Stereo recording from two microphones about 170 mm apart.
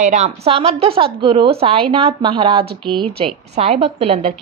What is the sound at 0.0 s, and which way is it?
A woman's voice, 45° right (ahead or behind).